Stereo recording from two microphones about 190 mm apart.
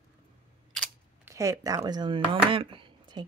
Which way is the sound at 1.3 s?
15° right (ahead or behind).